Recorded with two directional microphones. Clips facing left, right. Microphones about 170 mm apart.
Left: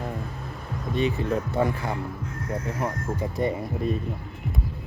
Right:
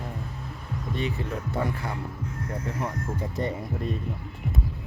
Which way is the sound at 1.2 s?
20° left (ahead or behind).